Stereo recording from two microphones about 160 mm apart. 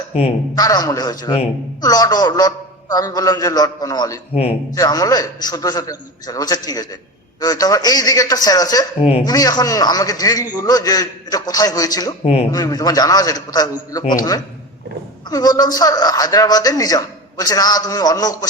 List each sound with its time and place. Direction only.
0.5 s a man's voice: 25° left (ahead or behind)
9.0 s speech: 40° left (ahead or behind)
9.2 s a man's voice: 25° left (ahead or behind)
12.2 s speech: 40° left (ahead or behind)
12.5 s a man's voice: 20° left (ahead or behind)